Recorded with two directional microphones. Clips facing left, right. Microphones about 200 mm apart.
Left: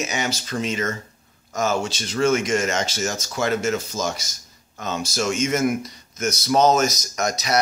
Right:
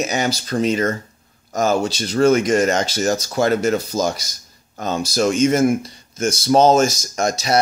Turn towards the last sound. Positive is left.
turn(degrees=-30)  # may be behind; listen again after turning